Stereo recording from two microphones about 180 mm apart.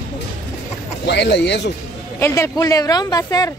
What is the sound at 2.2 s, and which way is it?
Speech, 15° left (ahead or behind).